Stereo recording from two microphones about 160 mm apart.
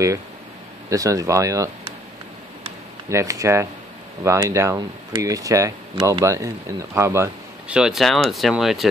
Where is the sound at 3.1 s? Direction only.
20° right (ahead or behind).